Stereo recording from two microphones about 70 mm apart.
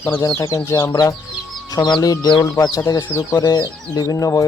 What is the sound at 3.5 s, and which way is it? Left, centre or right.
Speech, left.